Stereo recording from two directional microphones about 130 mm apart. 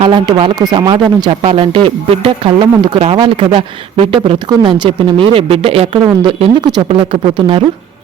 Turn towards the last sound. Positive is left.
turn(degrees=-45)  # may be behind; listen again after turning